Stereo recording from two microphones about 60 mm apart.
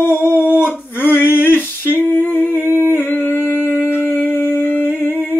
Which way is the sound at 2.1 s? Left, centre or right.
Left.